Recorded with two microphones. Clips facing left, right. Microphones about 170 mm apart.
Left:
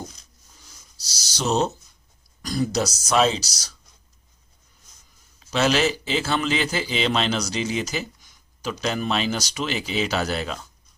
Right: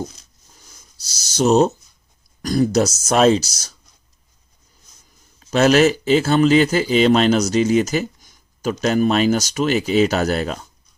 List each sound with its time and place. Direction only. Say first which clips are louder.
1.0 s speech: right 9 dB; 50° right (ahead or behind)
5.4 s speech: right 7 dB; 50° right (ahead or behind)